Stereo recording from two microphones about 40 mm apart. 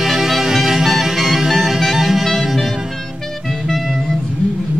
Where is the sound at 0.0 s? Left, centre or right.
Centre.